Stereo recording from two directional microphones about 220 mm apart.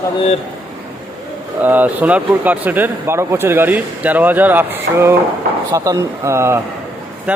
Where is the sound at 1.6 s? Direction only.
10° right (ahead or behind).